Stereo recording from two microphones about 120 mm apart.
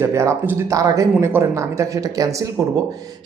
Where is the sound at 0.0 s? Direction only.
25° right (ahead or behind).